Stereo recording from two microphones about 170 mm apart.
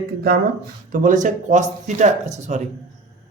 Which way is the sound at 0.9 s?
50° right (ahead or behind).